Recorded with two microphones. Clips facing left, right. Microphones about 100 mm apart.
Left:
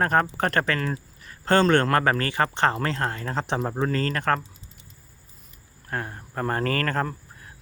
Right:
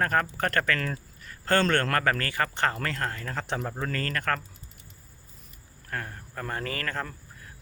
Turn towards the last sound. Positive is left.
turn(degrees=45)  # may be behind; listen again after turning